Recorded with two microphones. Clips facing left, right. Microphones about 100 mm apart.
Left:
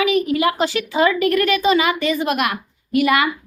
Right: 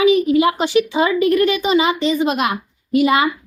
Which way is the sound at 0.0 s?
25° right (ahead or behind).